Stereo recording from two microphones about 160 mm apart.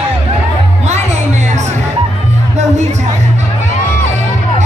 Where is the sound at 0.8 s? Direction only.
45° right (ahead or behind).